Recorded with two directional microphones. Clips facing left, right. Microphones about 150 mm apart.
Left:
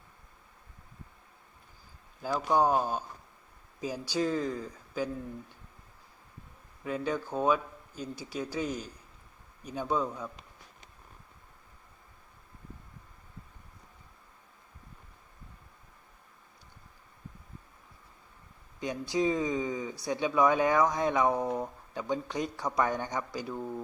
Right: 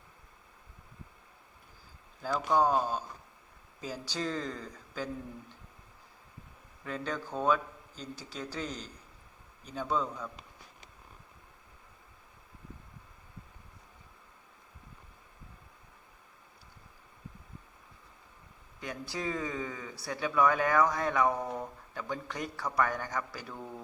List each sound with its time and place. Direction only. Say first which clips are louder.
2.2 s a man's voice: left 1 dB; 10° left (ahead or behind)
6.8 s a man's voice: left 4 dB; 10° left (ahead or behind)
18.8 s speech: left 8 dB; 20° left (ahead or behind)